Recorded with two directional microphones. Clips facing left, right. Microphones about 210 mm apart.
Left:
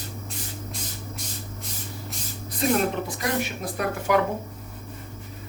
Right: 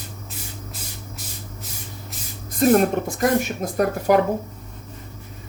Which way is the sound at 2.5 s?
45° right (ahead or behind).